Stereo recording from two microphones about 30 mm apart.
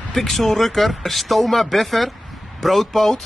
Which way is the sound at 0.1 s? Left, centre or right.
Centre.